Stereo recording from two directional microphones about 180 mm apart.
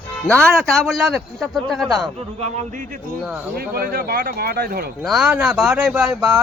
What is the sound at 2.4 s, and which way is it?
Speech, 45° right (ahead or behind).